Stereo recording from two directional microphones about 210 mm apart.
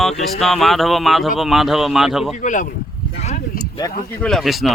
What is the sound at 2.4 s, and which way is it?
Speech, 35° left (ahead or behind).